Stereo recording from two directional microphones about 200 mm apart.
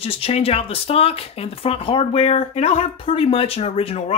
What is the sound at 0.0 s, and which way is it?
Speech, 30° left (ahead or behind).